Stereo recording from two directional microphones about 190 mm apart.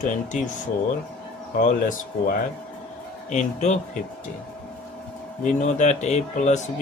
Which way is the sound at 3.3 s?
40° left (ahead or behind).